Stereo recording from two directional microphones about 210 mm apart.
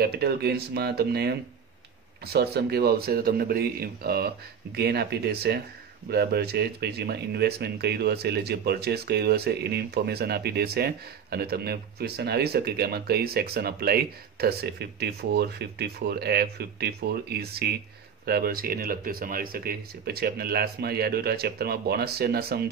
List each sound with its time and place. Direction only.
0.0 s speech: 50° right (ahead or behind)